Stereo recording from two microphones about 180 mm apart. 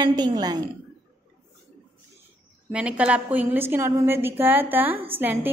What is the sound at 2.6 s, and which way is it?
A woman's voice, 5° right (ahead or behind).